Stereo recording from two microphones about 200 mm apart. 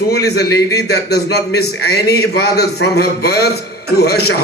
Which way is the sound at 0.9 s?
55° left (ahead or behind).